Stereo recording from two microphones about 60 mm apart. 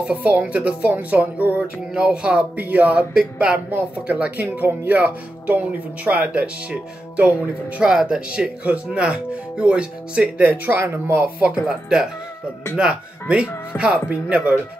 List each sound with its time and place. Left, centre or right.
0.0 s speech: right
7.8 s speech: centre
10.3 s speech: right
11.2 s speech: right
11.6 s speech: centre
12.7 s speech: centre